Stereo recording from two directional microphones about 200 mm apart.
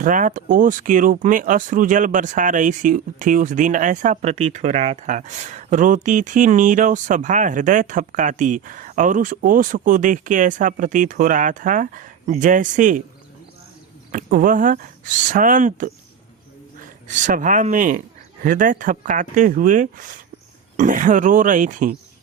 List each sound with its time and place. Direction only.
0.0 s speech: 40° right (ahead or behind)
14.1 s speech: 40° right (ahead or behind)